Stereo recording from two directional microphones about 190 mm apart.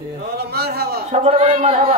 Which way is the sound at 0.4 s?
55° right (ahead or behind).